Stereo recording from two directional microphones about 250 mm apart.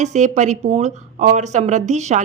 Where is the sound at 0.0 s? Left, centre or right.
Right.